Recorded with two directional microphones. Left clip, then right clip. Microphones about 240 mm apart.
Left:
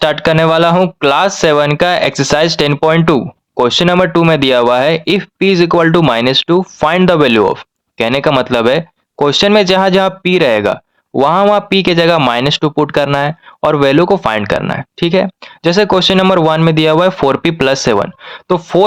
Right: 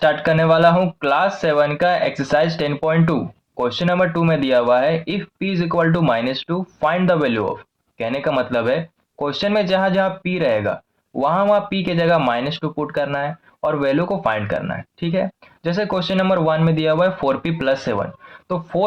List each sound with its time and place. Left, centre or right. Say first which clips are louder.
0.0 s speech: left 6 dB; left